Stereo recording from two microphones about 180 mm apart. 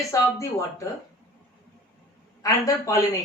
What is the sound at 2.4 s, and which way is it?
Speech, 20° left (ahead or behind).